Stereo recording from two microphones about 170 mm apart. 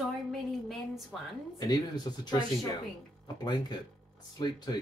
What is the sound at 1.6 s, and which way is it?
Speech, 25° left (ahead or behind).